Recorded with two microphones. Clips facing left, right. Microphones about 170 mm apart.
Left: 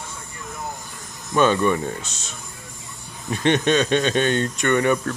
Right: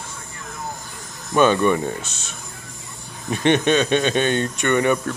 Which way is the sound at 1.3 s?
15° right (ahead or behind).